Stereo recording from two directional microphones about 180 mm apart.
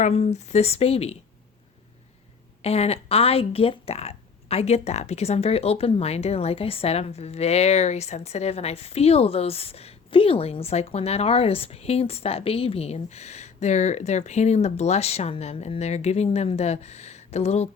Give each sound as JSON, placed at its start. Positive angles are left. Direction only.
{"t": 0.0, "sound": "speech", "side_deg": 35}
{"t": 2.6, "sound": "speech", "side_deg": 35}